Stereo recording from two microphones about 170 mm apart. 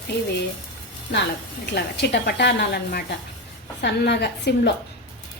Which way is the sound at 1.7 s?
75° left (ahead or behind).